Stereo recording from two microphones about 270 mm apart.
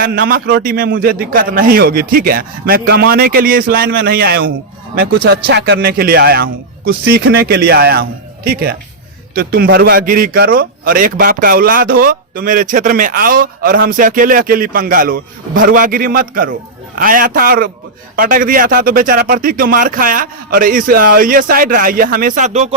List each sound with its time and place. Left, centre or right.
0.0 s a man's voice: right